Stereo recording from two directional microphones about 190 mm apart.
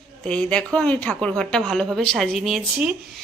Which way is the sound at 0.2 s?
5° left (ahead or behind).